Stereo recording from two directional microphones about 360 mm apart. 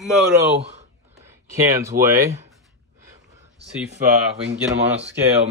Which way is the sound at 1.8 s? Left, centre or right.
Centre.